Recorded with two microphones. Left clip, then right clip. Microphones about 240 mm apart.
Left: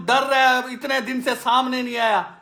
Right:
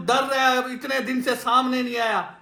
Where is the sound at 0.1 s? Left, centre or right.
Left.